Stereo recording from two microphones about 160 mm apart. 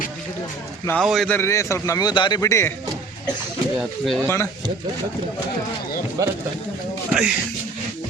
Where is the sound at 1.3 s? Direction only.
15° left (ahead or behind).